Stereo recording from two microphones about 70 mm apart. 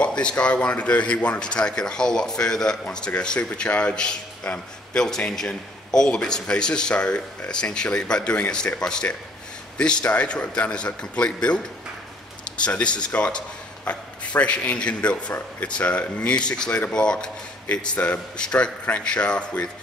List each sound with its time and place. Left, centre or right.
0.0 s a man's voice: centre